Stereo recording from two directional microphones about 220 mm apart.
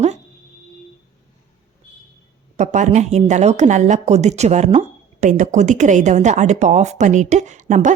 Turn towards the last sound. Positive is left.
turn(degrees=-35)  # may be behind; listen again after turning